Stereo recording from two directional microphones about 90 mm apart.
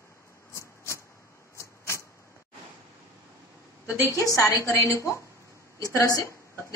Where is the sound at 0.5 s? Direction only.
30° left (ahead or behind).